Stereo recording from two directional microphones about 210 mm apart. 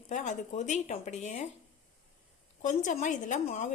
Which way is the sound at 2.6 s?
35° left (ahead or behind).